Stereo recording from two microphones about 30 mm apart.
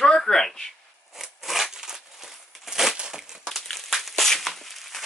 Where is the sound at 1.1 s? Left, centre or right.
Centre.